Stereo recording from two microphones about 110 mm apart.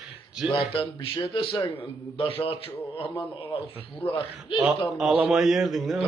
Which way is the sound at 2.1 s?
60° left (ahead or behind).